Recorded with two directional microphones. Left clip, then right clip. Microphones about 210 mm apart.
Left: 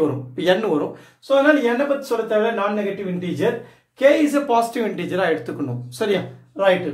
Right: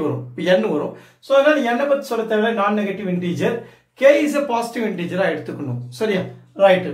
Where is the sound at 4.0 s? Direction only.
20° left (ahead or behind).